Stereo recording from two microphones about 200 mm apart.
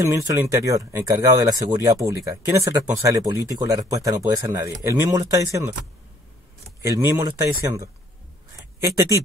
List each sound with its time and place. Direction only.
0.0 s speech: 15° right (ahead or behind)
6.8 s speech: 15° right (ahead or behind)